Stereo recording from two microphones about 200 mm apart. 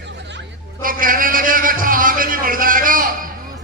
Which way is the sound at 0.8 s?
45° right (ahead or behind).